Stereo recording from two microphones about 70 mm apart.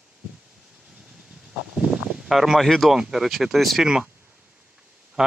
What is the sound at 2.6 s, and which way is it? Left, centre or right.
A man's voice, centre.